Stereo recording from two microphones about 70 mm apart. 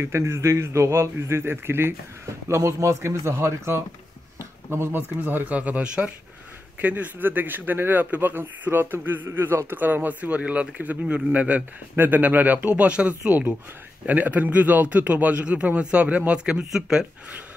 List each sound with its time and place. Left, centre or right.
0.0 s a man's voice: right; by 17.0 s centre